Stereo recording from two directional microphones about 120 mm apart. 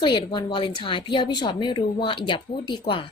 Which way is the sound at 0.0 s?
40° left (ahead or behind).